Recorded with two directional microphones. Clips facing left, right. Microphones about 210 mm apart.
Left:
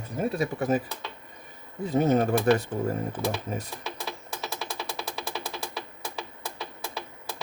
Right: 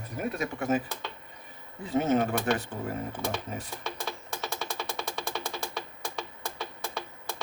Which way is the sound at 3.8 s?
Centre (ahead or behind).